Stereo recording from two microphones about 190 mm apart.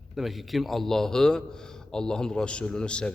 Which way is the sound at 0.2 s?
Centre (ahead or behind).